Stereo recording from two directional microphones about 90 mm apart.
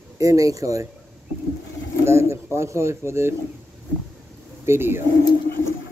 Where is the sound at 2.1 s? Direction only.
30° right (ahead or behind).